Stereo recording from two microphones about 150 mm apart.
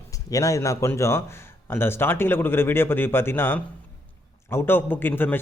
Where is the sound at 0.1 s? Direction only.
20° left (ahead or behind).